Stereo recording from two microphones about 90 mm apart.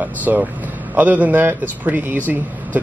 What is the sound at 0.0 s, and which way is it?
Speech, 20° right (ahead or behind).